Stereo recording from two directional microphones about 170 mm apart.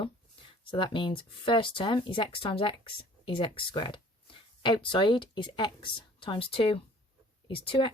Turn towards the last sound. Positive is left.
turn(degrees=30)  # may be behind; listen again after turning